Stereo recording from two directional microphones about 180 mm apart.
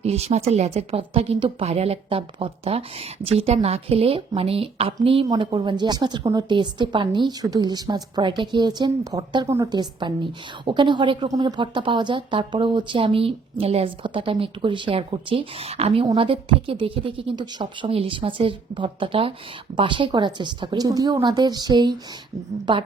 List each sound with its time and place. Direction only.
0.0 s a woman's voice: 35° right (ahead or behind)